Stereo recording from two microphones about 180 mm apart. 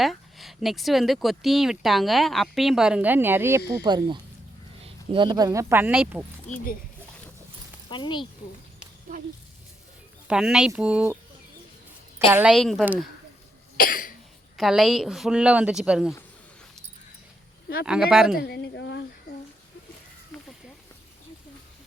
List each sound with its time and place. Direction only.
0.0 s speech: centre (ahead or behind)
7.9 s speech: 25° left (ahead or behind)
10.2 s speech: 5° right (ahead or behind)
12.3 s speech: 5° right (ahead or behind)
13.7 s cough: 50° left (ahead or behind)
14.5 s speech: centre (ahead or behind)
17.8 s speech: 5° right (ahead or behind)
18.3 s speech: 65° left (ahead or behind)
20.3 s a sound: 5° left (ahead or behind)